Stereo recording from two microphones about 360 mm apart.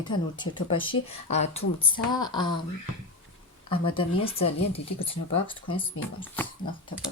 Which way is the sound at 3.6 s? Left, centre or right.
Centre.